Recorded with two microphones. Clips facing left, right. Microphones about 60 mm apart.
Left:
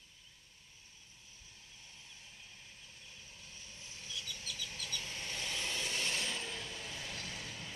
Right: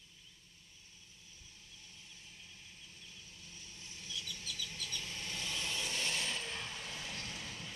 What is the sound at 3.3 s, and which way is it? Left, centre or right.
Vehicle, left.